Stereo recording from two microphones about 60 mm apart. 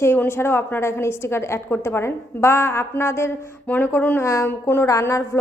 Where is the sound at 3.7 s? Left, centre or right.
Left.